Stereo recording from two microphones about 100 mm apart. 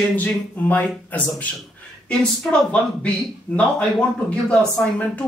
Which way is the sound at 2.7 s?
10° left (ahead or behind).